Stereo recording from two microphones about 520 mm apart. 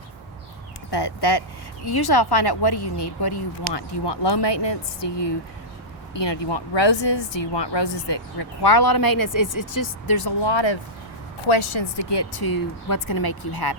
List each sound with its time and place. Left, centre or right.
0.9 s speech: left